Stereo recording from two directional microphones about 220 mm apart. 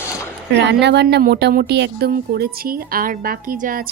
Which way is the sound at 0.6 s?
50° right (ahead or behind).